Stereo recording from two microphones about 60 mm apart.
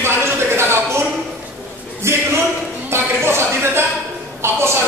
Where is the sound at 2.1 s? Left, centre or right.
Right.